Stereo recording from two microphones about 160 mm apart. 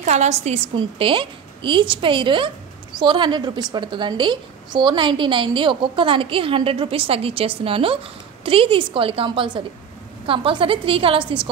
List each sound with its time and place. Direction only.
0.0 s a woman's voice: 45° right (ahead or behind)
0.7 s a woman's voice: 35° right (ahead or behind)